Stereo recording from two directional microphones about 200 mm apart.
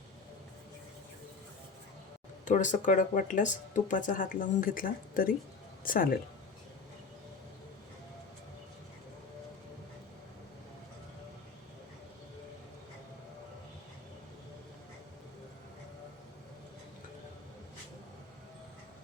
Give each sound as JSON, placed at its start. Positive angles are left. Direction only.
{"t": 2.4, "sound": "speech", "side_deg": 40}